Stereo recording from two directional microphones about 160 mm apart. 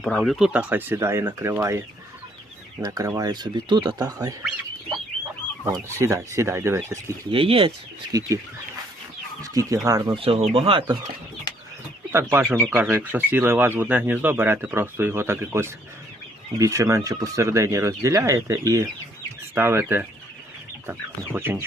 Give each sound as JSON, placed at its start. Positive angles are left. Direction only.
{"t": 0.0, "sound": "speech", "side_deg": 0}
{"t": 2.8, "sound": "speech", "side_deg": -20}
{"t": 5.6, "sound": "speech", "side_deg": -20}
{"t": 7.3, "sound": "speech", "side_deg": -35}
{"t": 8.1, "sound": "speech", "side_deg": -25}
{"t": 9.4, "sound": "speech", "side_deg": -20}
{"t": 10.2, "sound": "speech", "side_deg": -35}
{"t": 12.1, "sound": "speech", "side_deg": -15}
{"t": 21.3, "sound": "speech", "side_deg": -15}